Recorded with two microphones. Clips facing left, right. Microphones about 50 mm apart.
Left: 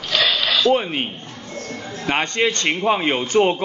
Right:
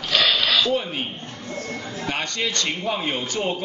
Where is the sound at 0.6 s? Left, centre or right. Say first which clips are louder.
Left 5 dB; left.